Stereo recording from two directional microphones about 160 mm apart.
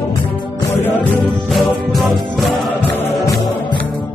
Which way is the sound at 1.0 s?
5° left (ahead or behind).